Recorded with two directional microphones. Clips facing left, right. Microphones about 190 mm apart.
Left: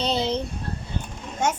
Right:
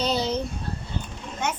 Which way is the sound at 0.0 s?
25° left (ahead or behind).